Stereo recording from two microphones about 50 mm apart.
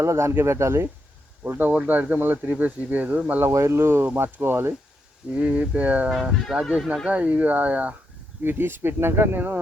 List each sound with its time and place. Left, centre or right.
0.0 s speech: right
1.5 s speech: right
1.7 s speech: right
3.5 s speech: right
5.3 s speech: right
6.5 s speech: centre
7.1 s speech: right
8.4 s speech: right